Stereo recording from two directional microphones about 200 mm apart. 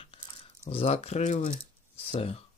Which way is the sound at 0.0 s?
30° left (ahead or behind).